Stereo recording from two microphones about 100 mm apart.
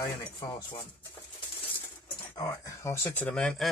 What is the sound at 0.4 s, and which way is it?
Speech, 50° left (ahead or behind).